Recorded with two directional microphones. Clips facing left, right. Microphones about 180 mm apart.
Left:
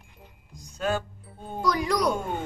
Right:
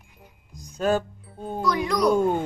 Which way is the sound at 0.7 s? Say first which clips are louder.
Right 5 dB; 40° right (ahead or behind).